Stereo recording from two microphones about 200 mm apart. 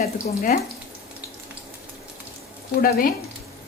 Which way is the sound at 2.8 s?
50° left (ahead or behind).